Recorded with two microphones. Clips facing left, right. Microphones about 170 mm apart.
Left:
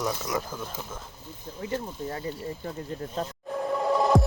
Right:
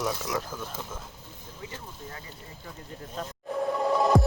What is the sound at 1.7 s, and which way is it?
Speech, 35° left (ahead or behind).